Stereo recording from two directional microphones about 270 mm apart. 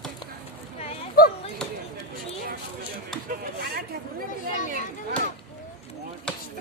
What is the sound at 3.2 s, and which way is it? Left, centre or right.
Speech, right.